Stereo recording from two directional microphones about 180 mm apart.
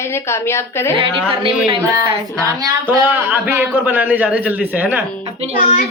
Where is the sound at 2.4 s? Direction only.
20° right (ahead or behind).